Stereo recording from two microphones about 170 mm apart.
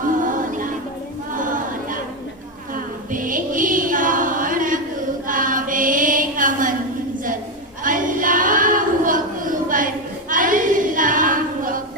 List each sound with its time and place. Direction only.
0.0 s music: 50° right (ahead or behind)
3.1 s music: 50° right (ahead or behind)
5.3 s chant: 50° right (ahead or behind)
7.9 s a sound: 50° right (ahead or behind)